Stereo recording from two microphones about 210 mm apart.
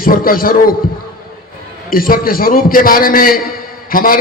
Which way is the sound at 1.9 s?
45° left (ahead or behind).